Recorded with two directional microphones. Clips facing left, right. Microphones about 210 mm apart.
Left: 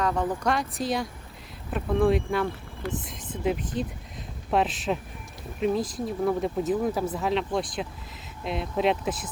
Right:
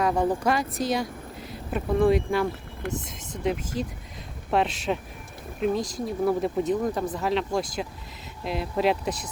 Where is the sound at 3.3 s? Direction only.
Centre (ahead or behind).